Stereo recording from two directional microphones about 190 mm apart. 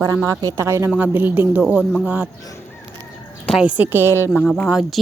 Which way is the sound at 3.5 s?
5° right (ahead or behind).